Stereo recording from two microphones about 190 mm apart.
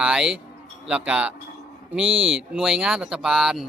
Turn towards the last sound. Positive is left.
turn(degrees=0)  # may be behind; listen again after turning